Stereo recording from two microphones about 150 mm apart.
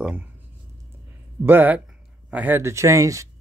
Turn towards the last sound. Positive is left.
turn(degrees=-20)  # may be behind; listen again after turning